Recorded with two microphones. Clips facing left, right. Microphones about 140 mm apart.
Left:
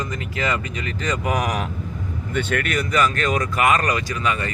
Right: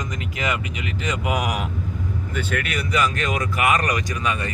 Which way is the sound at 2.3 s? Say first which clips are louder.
Left 5 dB; 5° right (ahead or behind).